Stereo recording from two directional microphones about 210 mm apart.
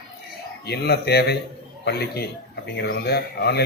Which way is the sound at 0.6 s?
50° left (ahead or behind).